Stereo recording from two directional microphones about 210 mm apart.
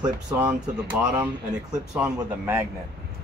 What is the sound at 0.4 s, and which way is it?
Speech, 10° right (ahead or behind).